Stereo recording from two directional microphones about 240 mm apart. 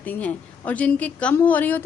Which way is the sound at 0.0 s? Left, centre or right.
Centre.